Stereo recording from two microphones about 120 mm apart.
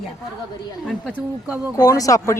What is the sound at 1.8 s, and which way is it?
Speech, 30° left (ahead or behind).